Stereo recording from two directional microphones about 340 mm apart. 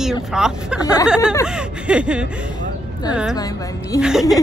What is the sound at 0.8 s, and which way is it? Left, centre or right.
Speech, centre.